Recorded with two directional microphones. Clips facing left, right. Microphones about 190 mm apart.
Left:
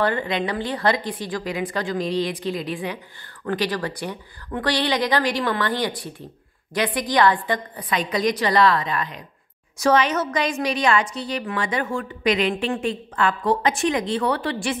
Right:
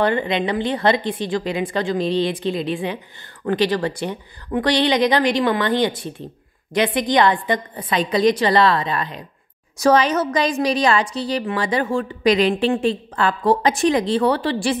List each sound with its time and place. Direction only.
0.0 s a woman's voice: 20° right (ahead or behind)